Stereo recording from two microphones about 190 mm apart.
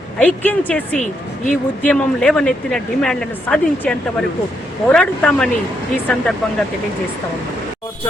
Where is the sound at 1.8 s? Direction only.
5° left (ahead or behind).